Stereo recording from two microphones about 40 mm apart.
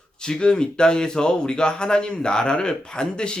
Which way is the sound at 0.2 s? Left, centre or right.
Left.